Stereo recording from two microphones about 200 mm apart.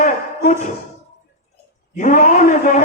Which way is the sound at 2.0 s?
40° left (ahead or behind).